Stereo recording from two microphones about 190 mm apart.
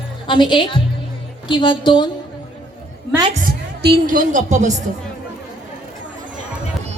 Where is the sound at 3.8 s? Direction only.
50° right (ahead or behind).